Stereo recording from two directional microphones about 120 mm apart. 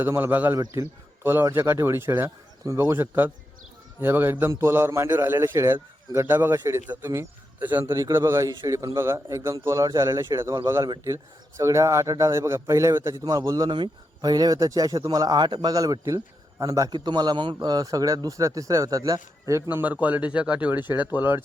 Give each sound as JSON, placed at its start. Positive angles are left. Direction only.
{"t": 0.0, "sound": "a man's voice", "side_deg": -15}
{"t": 13.7, "sound": "speech", "side_deg": -40}
{"t": 15.7, "sound": "a man's voice", "side_deg": -30}